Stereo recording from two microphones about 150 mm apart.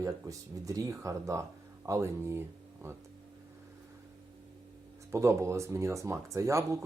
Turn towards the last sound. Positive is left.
turn(degrees=-20)  # may be behind; listen again after turning